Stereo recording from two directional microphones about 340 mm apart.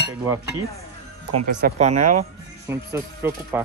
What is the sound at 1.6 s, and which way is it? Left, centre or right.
Speech, right.